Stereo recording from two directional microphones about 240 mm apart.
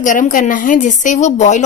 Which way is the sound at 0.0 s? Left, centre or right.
Left.